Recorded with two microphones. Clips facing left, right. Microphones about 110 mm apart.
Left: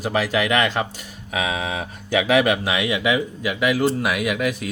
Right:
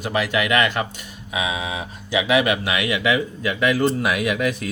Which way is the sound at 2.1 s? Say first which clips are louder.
Left 1 dB; 45° left (ahead or behind).